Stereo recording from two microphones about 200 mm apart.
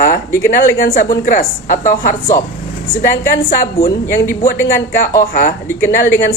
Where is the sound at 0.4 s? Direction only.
45° left (ahead or behind).